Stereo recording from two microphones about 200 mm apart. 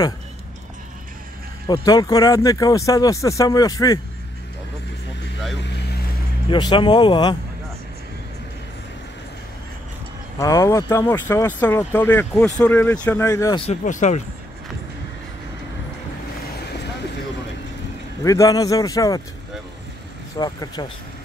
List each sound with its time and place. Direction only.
1.7 s speech: 20° left (ahead or behind)
5.6 s vehicle: 60° left (ahead or behind)
6.5 s speech: 25° left (ahead or behind)
10.4 s speech: 15° left (ahead or behind)
13.7 s speech: 40° left (ahead or behind)
18.2 s speech: 15° left (ahead or behind)
20.3 s speech: 20° left (ahead or behind)